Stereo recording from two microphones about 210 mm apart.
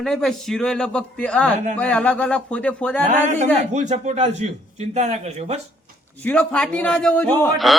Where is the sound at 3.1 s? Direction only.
35° right (ahead or behind).